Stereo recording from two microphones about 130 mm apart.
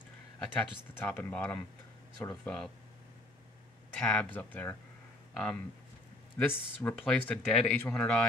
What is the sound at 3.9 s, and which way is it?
Speech, 10° left (ahead or behind).